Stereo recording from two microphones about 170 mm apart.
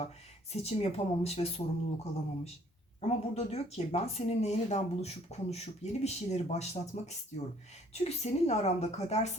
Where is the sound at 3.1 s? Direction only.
35° left (ahead or behind).